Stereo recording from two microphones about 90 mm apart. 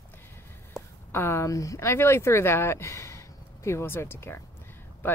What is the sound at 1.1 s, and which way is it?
Speech, 30° left (ahead or behind).